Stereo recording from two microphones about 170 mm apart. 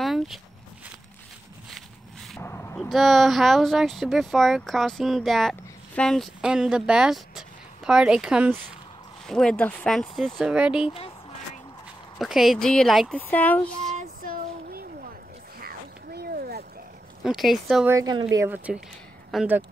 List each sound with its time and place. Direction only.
0.0 s walk: centre (ahead or behind)
2.4 s a sound: 15° left (ahead or behind)
2.9 s speech: centre (ahead or behind)
12.2 s speech: centre (ahead or behind)
13.7 s music: 50° right (ahead or behind)
15.6 s a sound: 65° right (ahead or behind)
17.2 s speech: centre (ahead or behind)
17.8 s a woman's voice: 20° right (ahead or behind)